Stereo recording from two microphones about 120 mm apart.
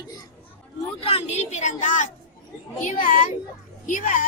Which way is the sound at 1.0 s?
60° left (ahead or behind).